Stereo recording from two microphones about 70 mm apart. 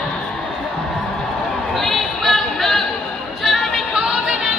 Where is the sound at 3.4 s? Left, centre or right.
Centre.